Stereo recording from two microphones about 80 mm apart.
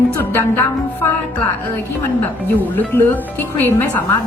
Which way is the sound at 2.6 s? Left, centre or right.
Left.